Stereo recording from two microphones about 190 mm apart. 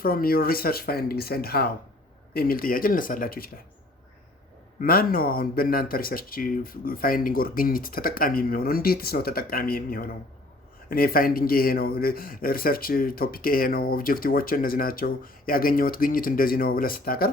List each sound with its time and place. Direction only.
0.0 s speech: 50° left (ahead or behind)
4.8 s speech: 50° left (ahead or behind)